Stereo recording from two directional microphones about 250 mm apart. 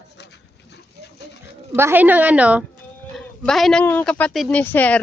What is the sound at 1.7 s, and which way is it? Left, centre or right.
A woman's voice, centre.